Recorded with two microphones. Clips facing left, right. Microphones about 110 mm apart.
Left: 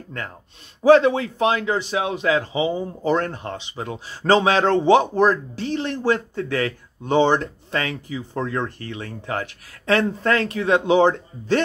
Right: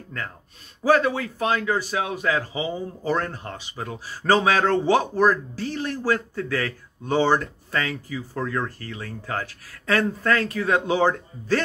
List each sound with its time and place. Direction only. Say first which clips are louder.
0.8 s speech: left 6 dB; 25° left (ahead or behind)